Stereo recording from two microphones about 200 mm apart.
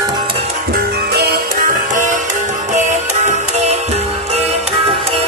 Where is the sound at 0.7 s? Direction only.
55° right (ahead or behind).